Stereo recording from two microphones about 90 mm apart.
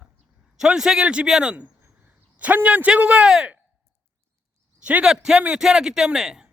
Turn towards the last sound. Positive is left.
turn(degrees=-5)  # may be behind; listen again after turning